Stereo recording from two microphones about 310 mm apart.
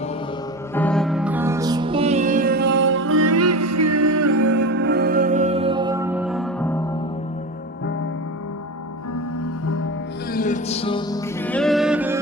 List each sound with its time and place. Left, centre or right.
0.7 s music: centre; by 4.6 s right
4.6 s music: right; by 7.0 s centre
10.3 s music: left; by 12.2 s centre